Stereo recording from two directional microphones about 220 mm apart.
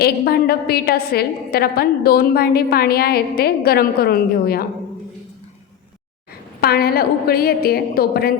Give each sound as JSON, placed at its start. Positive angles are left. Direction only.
{"t": 0.0, "sound": "a woman's voice", "side_deg": 45}
{"t": 6.6, "sound": "a woman's voice", "side_deg": 45}